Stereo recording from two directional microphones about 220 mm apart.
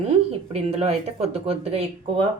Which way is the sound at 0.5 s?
30° right (ahead or behind).